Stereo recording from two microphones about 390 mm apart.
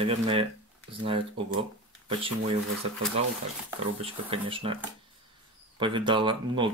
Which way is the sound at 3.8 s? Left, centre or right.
Centre.